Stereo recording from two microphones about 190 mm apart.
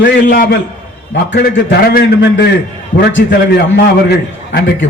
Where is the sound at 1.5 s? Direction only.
50° left (ahead or behind).